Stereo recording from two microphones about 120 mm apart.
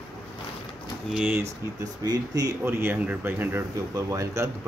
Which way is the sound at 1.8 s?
30° right (ahead or behind).